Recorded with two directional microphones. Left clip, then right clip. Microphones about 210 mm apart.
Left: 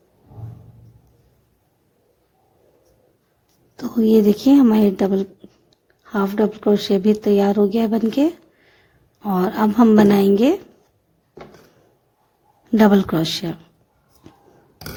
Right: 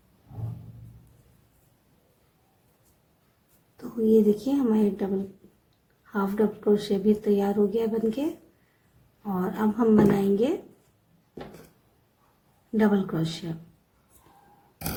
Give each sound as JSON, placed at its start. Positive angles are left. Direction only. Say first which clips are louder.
{"t": 3.8, "sound": "speech", "louder": "left 6 dB", "side_deg": 50}
{"t": 12.7, "sound": "speech", "louder": "left 10 dB", "side_deg": 50}